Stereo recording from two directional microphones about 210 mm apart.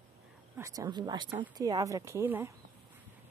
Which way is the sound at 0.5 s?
15° right (ahead or behind).